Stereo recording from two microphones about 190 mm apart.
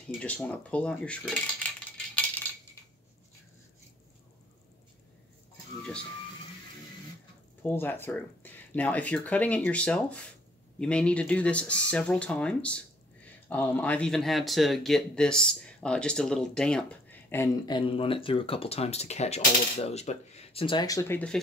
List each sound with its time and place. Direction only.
0.2 s speech: 5° left (ahead or behind)
7.6 s speech: 10° left (ahead or behind)
17.6 s speech: 25° left (ahead or behind); by 21.4 s 10° left (ahead or behind)